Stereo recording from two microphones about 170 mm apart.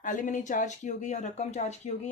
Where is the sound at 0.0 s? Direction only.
50° left (ahead or behind).